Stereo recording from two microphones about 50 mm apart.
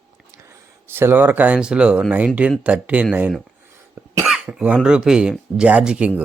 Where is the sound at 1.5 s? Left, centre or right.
Centre.